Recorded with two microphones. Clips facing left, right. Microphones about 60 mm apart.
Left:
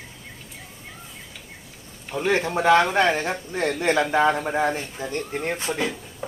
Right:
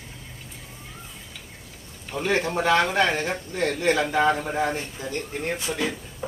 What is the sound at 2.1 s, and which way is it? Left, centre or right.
Speech, centre.